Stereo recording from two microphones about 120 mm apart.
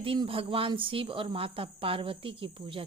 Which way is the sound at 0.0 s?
50° right (ahead or behind).